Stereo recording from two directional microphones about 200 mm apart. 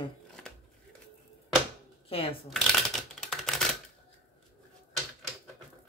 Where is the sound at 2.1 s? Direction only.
30° left (ahead or behind).